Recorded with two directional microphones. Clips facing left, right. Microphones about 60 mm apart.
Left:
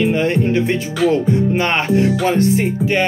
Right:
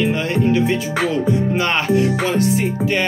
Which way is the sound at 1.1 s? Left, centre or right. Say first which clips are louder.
Left 2 dB; left.